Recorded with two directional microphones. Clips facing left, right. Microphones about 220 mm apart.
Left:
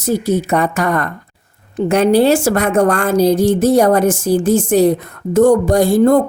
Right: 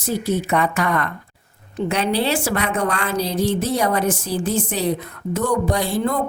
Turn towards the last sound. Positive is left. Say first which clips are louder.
# left 10 dB
turn(degrees=45)  # may be behind; listen again after turning